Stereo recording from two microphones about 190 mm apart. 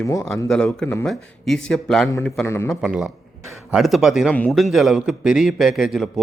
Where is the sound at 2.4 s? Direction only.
15° left (ahead or behind).